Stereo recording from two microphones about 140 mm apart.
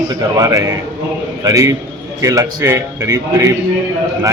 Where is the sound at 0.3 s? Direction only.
20° right (ahead or behind).